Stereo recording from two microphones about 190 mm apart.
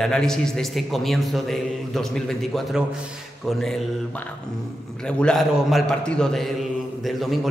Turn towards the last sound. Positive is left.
turn(degrees=0)  # may be behind; listen again after turning